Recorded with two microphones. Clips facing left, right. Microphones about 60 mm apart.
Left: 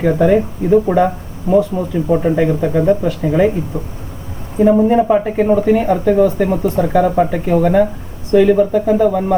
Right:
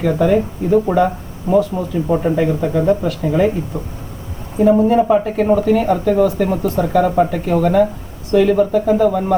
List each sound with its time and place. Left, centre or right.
0.0 s speech: centre
1.7 s speech: centre
2.5 s speech: centre
4.9 s speech: centre